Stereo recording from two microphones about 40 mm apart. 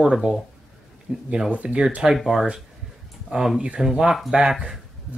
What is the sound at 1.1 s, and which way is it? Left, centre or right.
Speech, right.